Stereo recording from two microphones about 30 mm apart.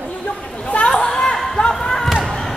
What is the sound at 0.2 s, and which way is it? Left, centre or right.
Chatter, left.